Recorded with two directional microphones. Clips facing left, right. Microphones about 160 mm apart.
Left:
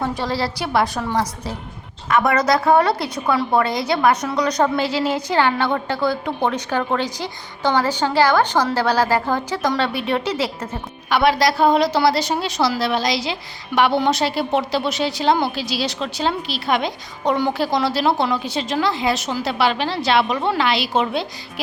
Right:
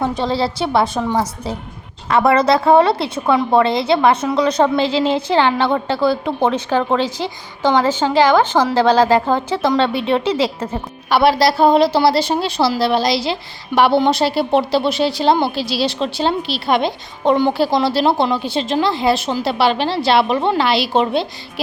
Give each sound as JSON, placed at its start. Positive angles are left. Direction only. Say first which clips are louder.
{"t": 0.0, "sound": "a woman's voice", "louder": "right 4 dB", "side_deg": -20}